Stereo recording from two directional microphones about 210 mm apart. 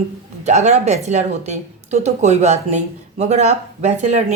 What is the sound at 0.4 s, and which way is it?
A woman's voice, 35° right (ahead or behind).